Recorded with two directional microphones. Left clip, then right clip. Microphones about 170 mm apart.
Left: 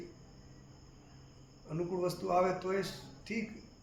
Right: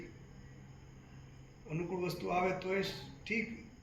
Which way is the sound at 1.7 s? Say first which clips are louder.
Left 3 dB; 30° left (ahead or behind).